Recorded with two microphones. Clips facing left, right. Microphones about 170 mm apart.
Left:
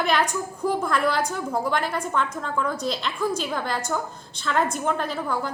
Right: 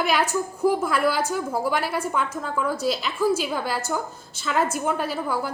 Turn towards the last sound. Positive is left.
turn(degrees=-10)  # may be behind; listen again after turning